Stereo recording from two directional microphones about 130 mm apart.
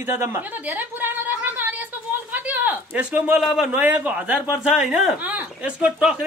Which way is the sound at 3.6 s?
10° right (ahead or behind).